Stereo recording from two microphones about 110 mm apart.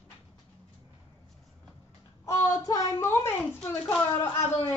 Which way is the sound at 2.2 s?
30° left (ahead or behind).